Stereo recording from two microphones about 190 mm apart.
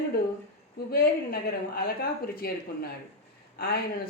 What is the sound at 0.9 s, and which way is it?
Speech, 50° left (ahead or behind).